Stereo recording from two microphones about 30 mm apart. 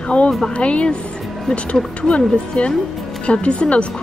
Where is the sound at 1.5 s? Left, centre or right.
Left.